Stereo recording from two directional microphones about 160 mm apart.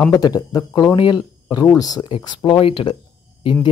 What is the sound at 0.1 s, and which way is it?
Speech, 25° left (ahead or behind).